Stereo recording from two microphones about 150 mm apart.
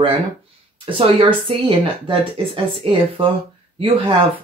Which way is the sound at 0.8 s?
35° right (ahead or behind).